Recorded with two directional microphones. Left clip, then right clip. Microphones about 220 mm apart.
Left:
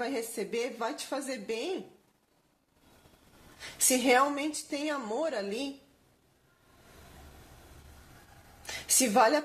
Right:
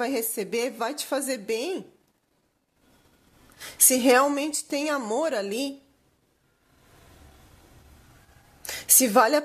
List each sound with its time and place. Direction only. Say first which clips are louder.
0.0 s a woman's voice: right 6 dB; 50° right (ahead or behind)
3.5 s a woman's voice: right 5 dB; 50° right (ahead or behind)
8.6 s a woman's voice: right 5 dB; 50° right (ahead or behind)